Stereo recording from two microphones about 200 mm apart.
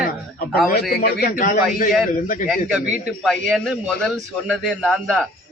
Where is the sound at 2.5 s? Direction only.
5° right (ahead or behind).